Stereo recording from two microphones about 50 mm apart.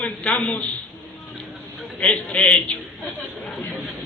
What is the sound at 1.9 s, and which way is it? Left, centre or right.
Speech, left.